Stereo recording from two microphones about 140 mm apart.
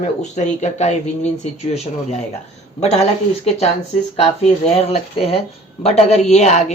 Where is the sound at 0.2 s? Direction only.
55° left (ahead or behind).